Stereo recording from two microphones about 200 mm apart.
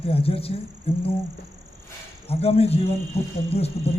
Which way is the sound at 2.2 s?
30° left (ahead or behind).